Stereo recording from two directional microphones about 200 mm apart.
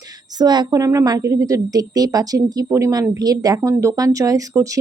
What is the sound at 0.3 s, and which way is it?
A woman's voice, 20° right (ahead or behind).